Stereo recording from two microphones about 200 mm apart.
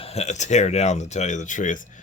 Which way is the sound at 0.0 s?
30° left (ahead or behind).